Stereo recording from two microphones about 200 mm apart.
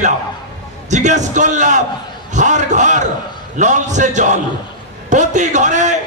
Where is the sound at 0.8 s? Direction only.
35° right (ahead or behind).